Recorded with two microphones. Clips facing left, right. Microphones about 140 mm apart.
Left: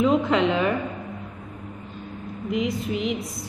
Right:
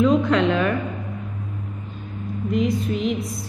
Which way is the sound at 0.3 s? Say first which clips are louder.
Right 2 dB; 20° left (ahead or behind).